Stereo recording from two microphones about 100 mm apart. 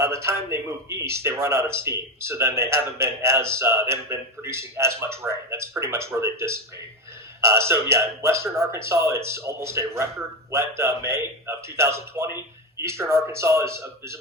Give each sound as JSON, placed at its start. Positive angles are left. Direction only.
{"t": 0.0, "sound": "a man's voice", "side_deg": -25}